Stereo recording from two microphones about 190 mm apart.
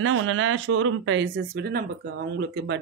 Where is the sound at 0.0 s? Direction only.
90° right.